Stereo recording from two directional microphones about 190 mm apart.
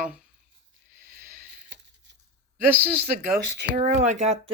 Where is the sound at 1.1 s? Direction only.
50° right (ahead or behind).